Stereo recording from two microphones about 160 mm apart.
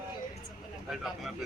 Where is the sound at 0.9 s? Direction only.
Centre (ahead or behind).